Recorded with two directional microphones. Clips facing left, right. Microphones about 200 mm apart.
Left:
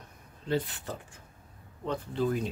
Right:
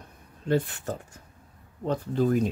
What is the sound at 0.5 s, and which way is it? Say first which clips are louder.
Speech: right 5 dB; 50° right (ahead or behind).